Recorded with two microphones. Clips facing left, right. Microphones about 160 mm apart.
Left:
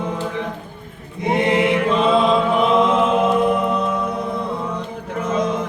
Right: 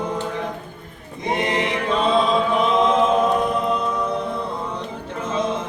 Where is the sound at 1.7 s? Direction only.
35° right (ahead or behind).